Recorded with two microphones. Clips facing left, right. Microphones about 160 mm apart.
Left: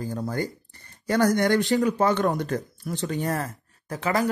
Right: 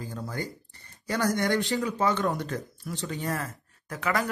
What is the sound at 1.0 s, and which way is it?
A man's voice, 50° left (ahead or behind).